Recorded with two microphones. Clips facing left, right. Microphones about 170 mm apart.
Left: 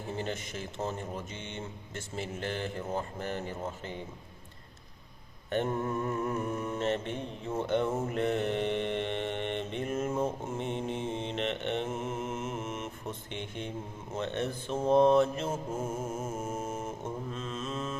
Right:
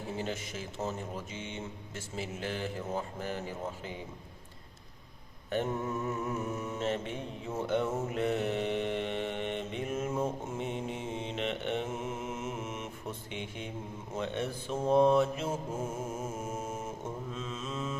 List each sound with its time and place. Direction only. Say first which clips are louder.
0.2 s mantra: left 1 dB; 5° right (ahead or behind)
5.5 s mantra: left 2 dB; 5° right (ahead or behind)
15.7 s mantra: left 2 dB; 10° left (ahead or behind)
17.3 s mantra: left 2 dB; 10° right (ahead or behind)